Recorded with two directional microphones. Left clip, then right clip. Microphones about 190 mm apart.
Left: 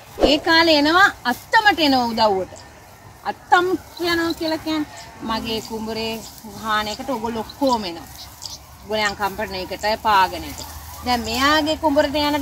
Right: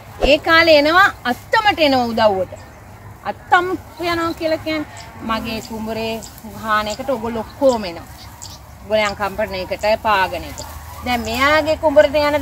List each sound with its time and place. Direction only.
0.2 s a woman's voice: 20° right (ahead or behind)